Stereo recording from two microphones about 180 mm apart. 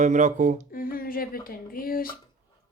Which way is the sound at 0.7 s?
55° left (ahead or behind).